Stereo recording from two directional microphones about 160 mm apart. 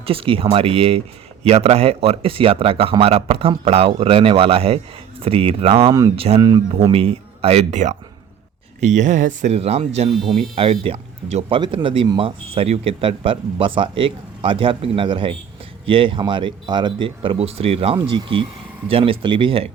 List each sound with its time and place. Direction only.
0.0 s speech: 35° right (ahead or behind)